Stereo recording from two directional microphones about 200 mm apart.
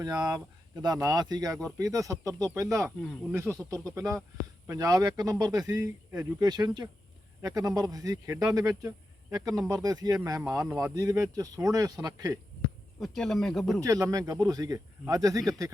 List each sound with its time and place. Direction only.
0.0 s speech: 20° right (ahead or behind)
2.8 s speech: centre (ahead or behind)
3.9 s speech: 15° right (ahead or behind)
13.0 s speech: centre (ahead or behind)
13.8 s speech: 15° right (ahead or behind)